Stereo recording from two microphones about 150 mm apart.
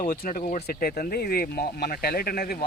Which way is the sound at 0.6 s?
80° left.